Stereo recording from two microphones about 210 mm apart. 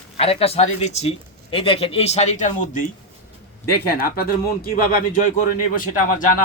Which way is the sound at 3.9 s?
45° left (ahead or behind).